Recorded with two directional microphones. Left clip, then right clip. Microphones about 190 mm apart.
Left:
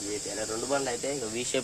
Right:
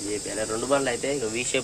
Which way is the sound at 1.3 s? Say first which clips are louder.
Right 4 dB; 25° left (ahead or behind).